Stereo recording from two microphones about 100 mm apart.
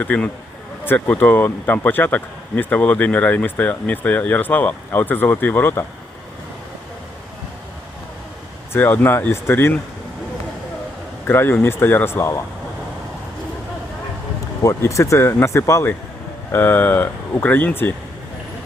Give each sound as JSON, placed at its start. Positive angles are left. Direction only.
{"t": 0.0, "sound": "speech", "side_deg": 15}
{"t": 8.7, "sound": "speech", "side_deg": 20}
{"t": 11.3, "sound": "speech", "side_deg": 20}
{"t": 14.6, "sound": "speech", "side_deg": 30}